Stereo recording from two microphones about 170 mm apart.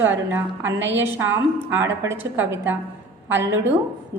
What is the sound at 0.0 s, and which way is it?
A woman's voice, 10° right (ahead or behind).